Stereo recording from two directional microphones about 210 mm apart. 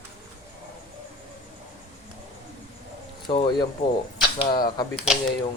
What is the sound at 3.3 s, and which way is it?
Speech, 20° left (ahead or behind).